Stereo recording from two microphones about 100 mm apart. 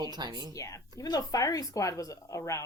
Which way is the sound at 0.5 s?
35° left (ahead or behind).